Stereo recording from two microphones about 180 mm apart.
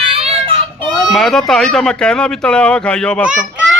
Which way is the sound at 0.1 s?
35° right (ahead or behind).